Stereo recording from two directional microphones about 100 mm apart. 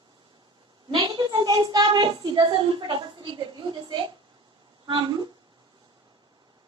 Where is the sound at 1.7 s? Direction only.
45° right (ahead or behind).